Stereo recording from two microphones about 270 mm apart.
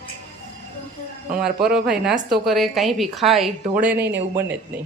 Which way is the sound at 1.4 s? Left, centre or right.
Centre.